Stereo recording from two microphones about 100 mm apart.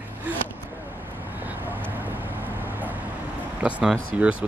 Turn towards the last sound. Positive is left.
turn(degrees=-15)  # may be behind; listen again after turning